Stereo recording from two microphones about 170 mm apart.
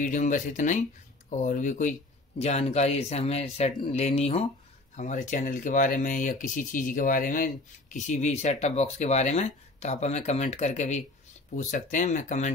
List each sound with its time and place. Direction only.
0.0 s speech: 50° left (ahead or behind)